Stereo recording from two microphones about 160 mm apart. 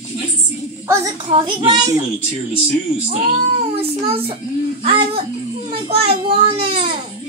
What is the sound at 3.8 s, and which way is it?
A child's voice, 40° right (ahead or behind).